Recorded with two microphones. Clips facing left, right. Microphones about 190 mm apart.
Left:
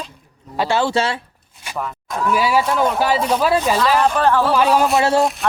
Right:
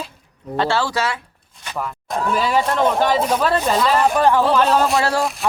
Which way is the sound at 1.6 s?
5° left (ahead or behind).